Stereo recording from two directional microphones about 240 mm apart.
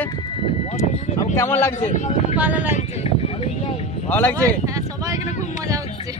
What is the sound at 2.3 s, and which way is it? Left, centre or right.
Speech, centre.